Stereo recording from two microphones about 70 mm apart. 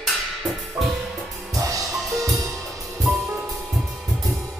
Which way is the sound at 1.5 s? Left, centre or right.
Right.